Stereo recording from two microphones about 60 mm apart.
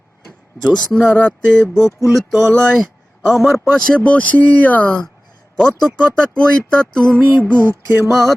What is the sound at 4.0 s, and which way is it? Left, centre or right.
Music, left.